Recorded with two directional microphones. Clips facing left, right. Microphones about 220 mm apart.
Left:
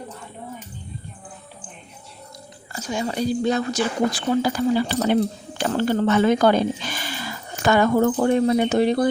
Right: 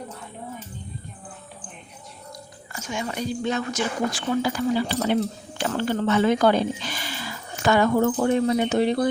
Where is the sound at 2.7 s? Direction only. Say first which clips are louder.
Left 4 dB; 35° left (ahead or behind).